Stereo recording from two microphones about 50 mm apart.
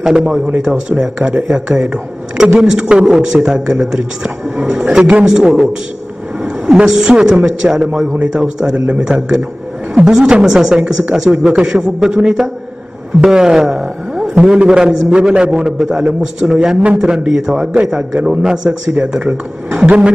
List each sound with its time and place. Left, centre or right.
0.0 s a man's voice: centre
6.9 s a man's voice: centre
8.7 s a man's voice: right